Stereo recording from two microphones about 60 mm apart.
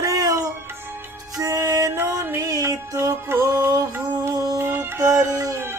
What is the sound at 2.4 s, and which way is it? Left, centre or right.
Music, right.